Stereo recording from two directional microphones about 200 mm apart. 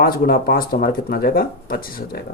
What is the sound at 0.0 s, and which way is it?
Speech, 45° left (ahead or behind).